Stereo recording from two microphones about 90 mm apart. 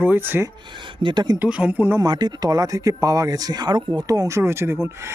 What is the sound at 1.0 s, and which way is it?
Speech, 55° right (ahead or behind).